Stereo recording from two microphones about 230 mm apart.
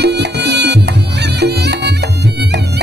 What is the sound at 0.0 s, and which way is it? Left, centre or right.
Music, right.